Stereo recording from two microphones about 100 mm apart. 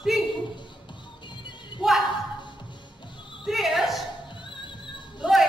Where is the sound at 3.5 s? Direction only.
Centre (ahead or behind).